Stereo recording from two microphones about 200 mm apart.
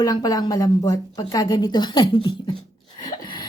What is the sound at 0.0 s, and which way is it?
A woman's voice, 20° left (ahead or behind).